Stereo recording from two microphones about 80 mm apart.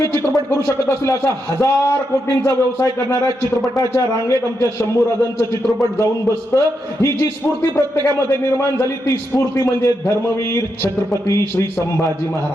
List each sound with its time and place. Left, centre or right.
0.0 s a man's voice: left